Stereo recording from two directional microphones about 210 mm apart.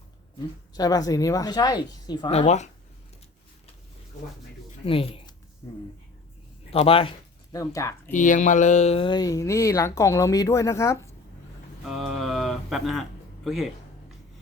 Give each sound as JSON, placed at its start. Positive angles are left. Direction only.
{"t": 0.7, "sound": "speech", "side_deg": 20}
{"t": 4.9, "sound": "speech", "side_deg": 25}
{"t": 7.5, "sound": "speech", "side_deg": 15}
{"t": 8.1, "sound": "speech", "side_deg": 35}
{"t": 11.9, "sound": "a sound", "side_deg": 0}